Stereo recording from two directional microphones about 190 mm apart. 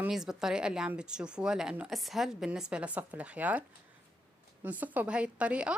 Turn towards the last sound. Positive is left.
turn(degrees=-5)  # may be behind; listen again after turning